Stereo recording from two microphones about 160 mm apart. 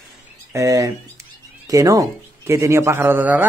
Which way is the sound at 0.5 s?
20° right (ahead or behind).